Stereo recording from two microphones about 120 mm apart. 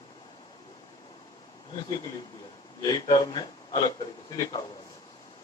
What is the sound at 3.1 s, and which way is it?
Speech, 40° left (ahead or behind).